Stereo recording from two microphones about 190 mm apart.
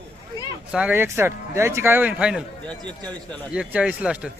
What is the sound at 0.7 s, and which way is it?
Speech, 5° right (ahead or behind).